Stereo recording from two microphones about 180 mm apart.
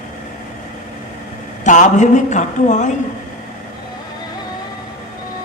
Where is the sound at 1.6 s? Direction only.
45° left (ahead or behind).